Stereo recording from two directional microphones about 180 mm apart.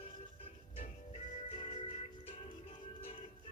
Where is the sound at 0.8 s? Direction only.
30° left (ahead or behind).